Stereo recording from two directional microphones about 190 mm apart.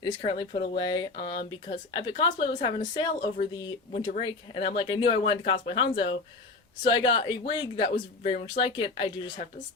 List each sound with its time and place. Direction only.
0.0 s speech: 25° left (ahead or behind)